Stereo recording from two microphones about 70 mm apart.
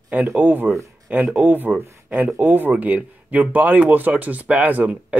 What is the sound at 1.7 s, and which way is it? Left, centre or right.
Speech, centre.